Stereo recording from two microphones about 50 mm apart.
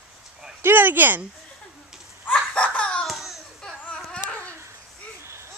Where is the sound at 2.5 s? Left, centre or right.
Left.